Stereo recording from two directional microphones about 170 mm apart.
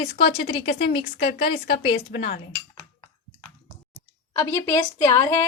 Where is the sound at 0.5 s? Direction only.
30° left (ahead or behind).